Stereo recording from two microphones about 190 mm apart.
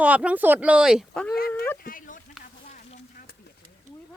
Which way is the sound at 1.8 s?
45° left (ahead or behind).